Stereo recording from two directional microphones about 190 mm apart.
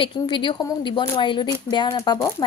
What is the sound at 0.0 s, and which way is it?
Speech, 25° left (ahead or behind).